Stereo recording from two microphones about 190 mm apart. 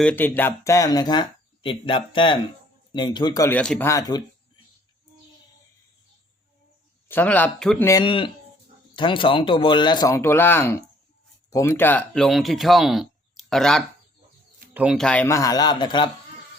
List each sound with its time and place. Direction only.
0.0 s speech: 10° left (ahead or behind)
3.6 s a man's voice: 5° left (ahead or behind)
7.1 s a man's voice: 10° left (ahead or behind)
7.9 s a man's voice: 20° left (ahead or behind)